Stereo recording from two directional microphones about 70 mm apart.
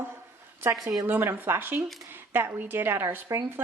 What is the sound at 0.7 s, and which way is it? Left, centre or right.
Speech, right.